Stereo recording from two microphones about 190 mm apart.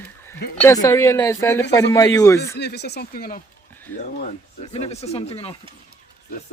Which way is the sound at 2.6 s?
60° left (ahead or behind).